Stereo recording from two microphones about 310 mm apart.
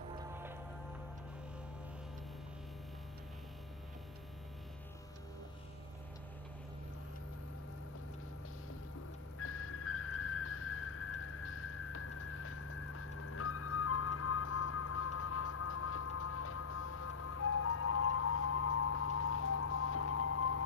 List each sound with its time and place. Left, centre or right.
0.1 s music: centre
9.4 s whistle: left